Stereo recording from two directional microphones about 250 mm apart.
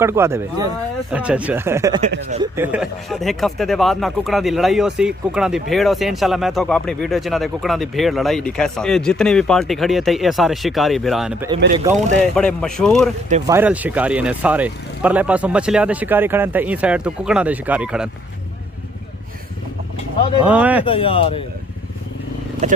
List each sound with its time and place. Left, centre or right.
0.0 s speech: centre
2.2 s speech: right
2.5 s speech: centre
20.4 s speech: centre
20.8 s speech: left
22.6 s speech: right